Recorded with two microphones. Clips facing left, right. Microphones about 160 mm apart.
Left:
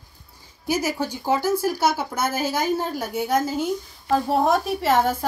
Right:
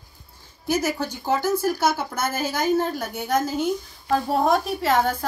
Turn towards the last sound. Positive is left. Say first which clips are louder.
# left 1 dB
turn(degrees=5)  # may be behind; listen again after turning